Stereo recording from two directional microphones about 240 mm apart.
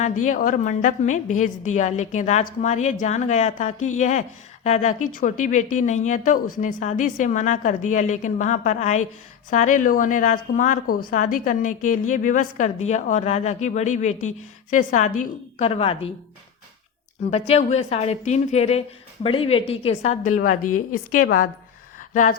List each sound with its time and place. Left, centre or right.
0.3 s a woman's voice: left
17.3 s a woman's voice: left
20.7 s a woman's voice: left
21.2 s a woman's voice: left